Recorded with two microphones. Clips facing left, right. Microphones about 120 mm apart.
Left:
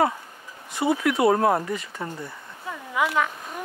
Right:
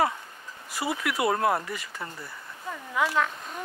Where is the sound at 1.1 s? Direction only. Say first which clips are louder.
Left 3 dB; 35° left (ahead or behind).